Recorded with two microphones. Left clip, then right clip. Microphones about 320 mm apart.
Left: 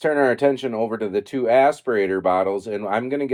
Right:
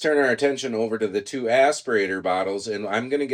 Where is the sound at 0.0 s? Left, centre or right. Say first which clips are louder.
Left 2 dB; centre.